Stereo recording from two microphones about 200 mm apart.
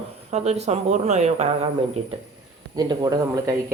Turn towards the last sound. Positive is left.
turn(degrees=-15)  # may be behind; listen again after turning